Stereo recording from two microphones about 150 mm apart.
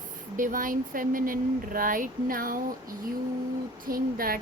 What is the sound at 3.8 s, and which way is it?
Speech, 75° right (ahead or behind).